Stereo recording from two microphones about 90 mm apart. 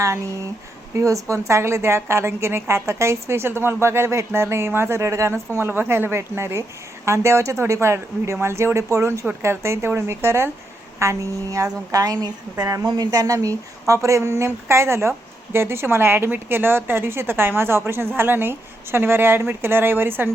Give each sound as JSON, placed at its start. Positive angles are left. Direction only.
{"t": 0.0, "sound": "a woman's voice", "side_deg": -35}